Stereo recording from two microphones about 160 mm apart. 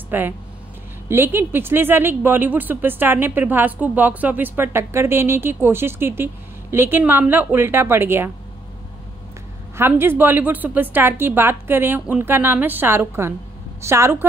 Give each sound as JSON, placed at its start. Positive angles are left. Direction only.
{"t": 0.1, "sound": "speech", "side_deg": -10}
{"t": 9.8, "sound": "a woman's voice", "side_deg": -15}